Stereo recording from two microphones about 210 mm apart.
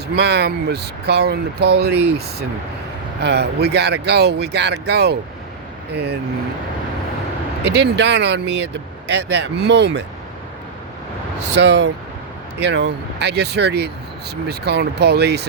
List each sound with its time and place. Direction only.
0.2 s speech: 50° right (ahead or behind)
7.6 s speech: 50° right (ahead or behind)
11.5 s speech: 55° right (ahead or behind)